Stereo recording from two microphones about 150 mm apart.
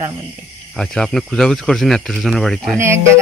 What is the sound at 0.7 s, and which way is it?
Speech, 5° left (ahead or behind).